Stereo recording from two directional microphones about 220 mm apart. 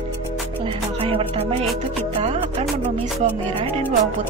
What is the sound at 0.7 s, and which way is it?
Music, 25° right (ahead or behind).